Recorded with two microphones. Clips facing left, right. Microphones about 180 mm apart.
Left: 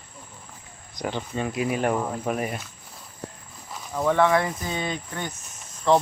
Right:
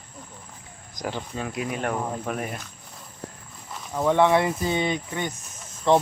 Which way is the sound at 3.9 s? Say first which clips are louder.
Right 1 dB; 10° right (ahead or behind).